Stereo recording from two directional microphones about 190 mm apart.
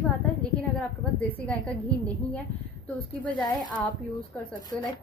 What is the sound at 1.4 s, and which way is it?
Speech, 5° left (ahead or behind).